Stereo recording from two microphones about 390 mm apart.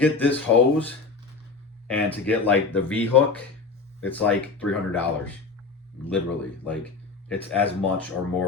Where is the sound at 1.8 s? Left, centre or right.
Centre.